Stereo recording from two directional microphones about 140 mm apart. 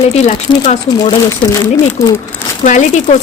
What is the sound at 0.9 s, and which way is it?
Speech, 25° left (ahead or behind).